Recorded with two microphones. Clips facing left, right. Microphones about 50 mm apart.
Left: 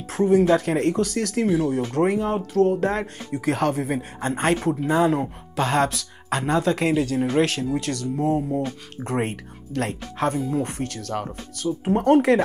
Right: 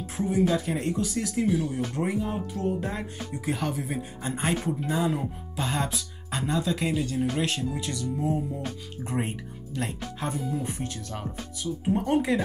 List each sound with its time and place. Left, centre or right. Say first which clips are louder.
0.0 s speech: left 7 dB; left
5.6 s speech: left 8 dB; left